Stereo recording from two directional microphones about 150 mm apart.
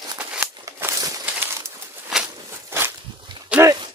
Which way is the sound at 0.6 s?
20° right (ahead or behind).